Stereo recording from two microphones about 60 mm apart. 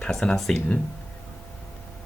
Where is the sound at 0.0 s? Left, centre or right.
Centre.